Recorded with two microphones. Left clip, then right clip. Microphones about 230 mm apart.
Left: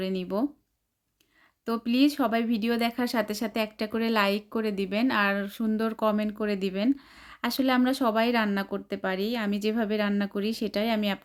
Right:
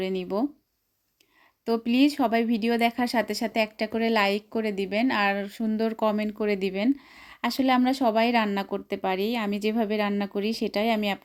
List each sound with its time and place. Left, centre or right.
0.0 s speech: centre
1.6 s speech: centre